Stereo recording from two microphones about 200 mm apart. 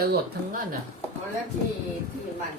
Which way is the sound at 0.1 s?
45° right (ahead or behind).